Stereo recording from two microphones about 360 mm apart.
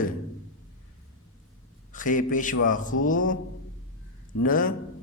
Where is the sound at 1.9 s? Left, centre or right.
Left.